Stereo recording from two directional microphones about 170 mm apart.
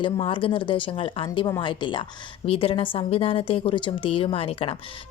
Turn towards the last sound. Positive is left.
turn(degrees=35)  # may be behind; listen again after turning